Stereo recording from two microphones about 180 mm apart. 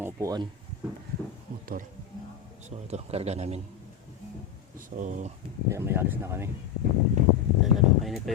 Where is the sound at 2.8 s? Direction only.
35° right (ahead or behind).